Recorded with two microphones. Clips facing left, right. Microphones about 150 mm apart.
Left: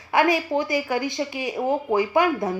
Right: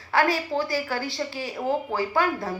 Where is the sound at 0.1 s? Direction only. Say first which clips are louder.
Left 3 dB; 20° left (ahead or behind).